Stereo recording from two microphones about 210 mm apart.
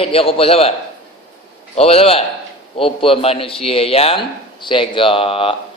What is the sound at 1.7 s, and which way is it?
A man's voice, 30° left (ahead or behind).